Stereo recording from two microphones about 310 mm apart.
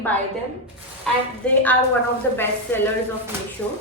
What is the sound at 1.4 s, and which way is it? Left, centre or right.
A woman's voice, centre.